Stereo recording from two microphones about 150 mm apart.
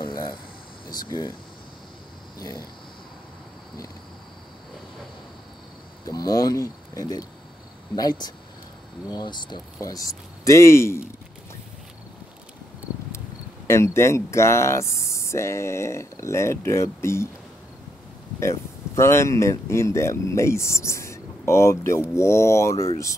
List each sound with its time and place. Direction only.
0.0 s a sound: 30° left (ahead or behind)
1.0 s speech: 25° left (ahead or behind)
6.0 s speech: 25° left (ahead or behind)
13.7 s speech: 20° left (ahead or behind)
18.4 s speech: 20° left (ahead or behind)